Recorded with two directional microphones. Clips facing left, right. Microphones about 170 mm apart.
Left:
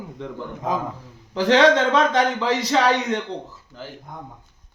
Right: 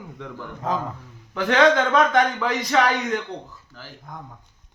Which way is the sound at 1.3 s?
30° left (ahead or behind).